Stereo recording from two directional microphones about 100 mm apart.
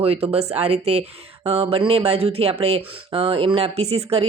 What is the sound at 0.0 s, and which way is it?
Speech, 80° right.